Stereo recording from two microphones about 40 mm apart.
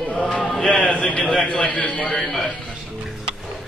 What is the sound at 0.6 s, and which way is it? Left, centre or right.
Speech, centre.